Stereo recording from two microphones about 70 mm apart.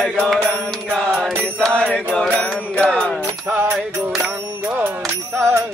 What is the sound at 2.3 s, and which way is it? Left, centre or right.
Music, centre.